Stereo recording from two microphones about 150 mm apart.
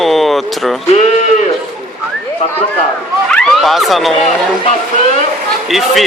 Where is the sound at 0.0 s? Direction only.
Centre (ahead or behind).